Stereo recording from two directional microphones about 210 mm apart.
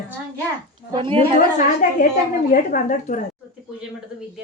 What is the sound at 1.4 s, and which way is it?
Speech, 40° left (ahead or behind).